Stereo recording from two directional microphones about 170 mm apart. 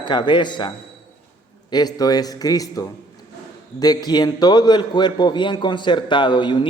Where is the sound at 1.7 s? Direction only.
25° left (ahead or behind).